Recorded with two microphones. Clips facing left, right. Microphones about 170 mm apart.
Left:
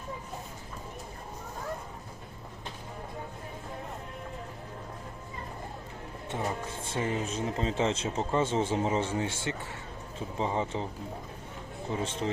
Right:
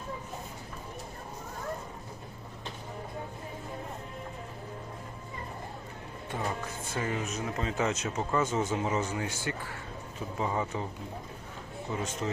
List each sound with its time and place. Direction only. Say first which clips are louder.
6.3 s speech: left 1 dB; 25° left (ahead or behind)
11.9 s speech: left 2 dB; 30° left (ahead or behind)